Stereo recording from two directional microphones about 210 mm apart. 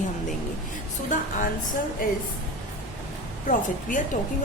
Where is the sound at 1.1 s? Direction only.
35° left (ahead or behind).